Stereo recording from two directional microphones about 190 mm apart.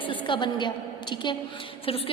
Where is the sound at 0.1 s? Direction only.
25° left (ahead or behind).